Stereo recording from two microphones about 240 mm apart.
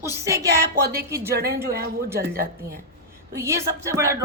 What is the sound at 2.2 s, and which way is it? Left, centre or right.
Speech, right.